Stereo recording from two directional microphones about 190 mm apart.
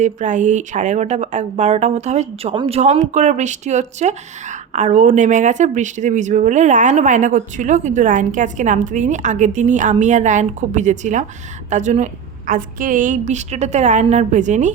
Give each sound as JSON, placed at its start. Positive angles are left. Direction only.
{"t": 0.0, "sound": "speech", "side_deg": -40}